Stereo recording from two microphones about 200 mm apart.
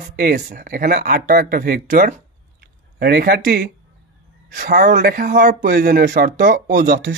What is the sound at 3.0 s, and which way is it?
Speech, 50° right (ahead or behind).